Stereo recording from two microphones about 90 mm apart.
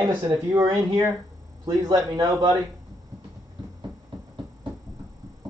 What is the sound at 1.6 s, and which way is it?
Speech, 50° right (ahead or behind).